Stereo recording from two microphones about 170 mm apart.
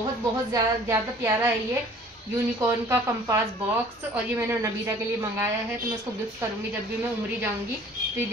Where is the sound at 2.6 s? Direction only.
15° right (ahead or behind).